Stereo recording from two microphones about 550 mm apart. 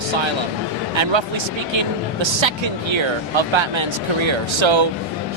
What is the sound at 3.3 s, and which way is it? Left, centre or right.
Speech, right.